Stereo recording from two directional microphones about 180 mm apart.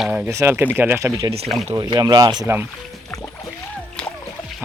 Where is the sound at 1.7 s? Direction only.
20° right (ahead or behind).